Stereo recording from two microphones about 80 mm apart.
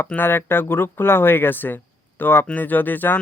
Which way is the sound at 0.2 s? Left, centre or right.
Left.